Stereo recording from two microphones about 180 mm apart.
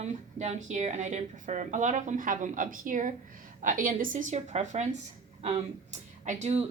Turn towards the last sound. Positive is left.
turn(degrees=-40)  # may be behind; listen again after turning